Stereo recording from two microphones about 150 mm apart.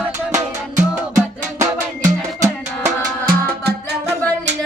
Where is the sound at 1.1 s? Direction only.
20° right (ahead or behind).